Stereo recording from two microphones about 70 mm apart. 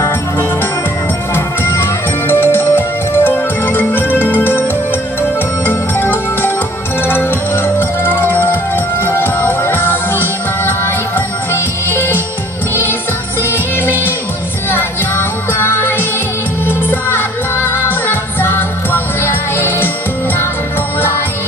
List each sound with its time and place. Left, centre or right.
1.3 s music: left
5.7 s music: left
13.4 s music: left